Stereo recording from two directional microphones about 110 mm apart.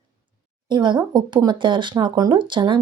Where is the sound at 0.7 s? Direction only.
45° right (ahead or behind).